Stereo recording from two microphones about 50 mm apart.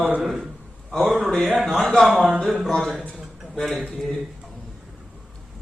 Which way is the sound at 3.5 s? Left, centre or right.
Centre.